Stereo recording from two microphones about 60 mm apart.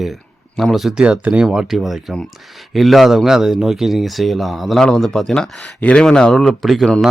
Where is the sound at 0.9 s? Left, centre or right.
Centre.